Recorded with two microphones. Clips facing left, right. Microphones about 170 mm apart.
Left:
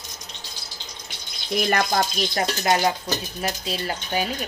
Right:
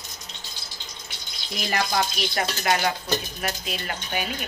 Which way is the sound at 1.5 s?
50° left (ahead or behind).